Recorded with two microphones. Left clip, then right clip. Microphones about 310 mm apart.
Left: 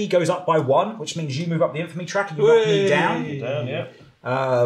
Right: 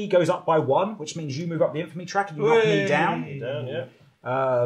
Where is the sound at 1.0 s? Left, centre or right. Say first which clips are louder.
Left 4 dB; right.